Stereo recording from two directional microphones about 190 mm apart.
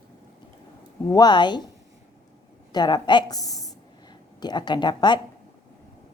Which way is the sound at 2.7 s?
25° left (ahead or behind).